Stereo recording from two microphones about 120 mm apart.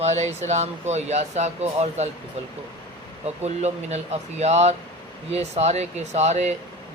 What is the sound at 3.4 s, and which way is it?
Speech, 65° right (ahead or behind).